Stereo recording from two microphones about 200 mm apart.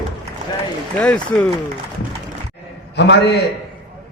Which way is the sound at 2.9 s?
60° left (ahead or behind).